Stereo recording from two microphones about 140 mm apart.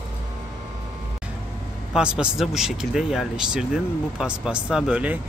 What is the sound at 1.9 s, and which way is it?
Speech, 5° right (ahead or behind).